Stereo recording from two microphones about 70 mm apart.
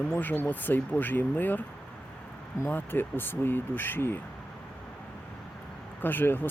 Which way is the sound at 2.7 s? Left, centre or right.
Left.